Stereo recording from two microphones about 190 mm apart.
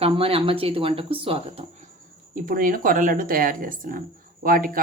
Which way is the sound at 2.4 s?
45° right (ahead or behind).